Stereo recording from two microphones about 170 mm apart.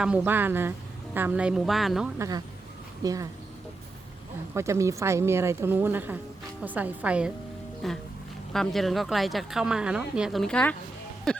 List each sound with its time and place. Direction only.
0.3 s a woman's voice: 10° right (ahead or behind)
2.1 s speech: 20° right (ahead or behind)
4.5 s a woman's voice: 15° right (ahead or behind); by 10.8 s 5° left (ahead or behind)
11.3 s music: 5° left (ahead or behind)